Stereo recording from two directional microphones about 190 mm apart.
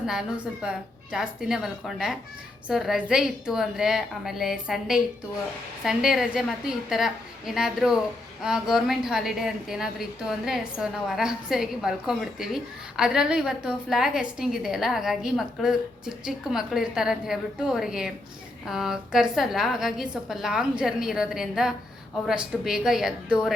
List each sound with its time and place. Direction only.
0.0 s a woman's voice: 5° right (ahead or behind)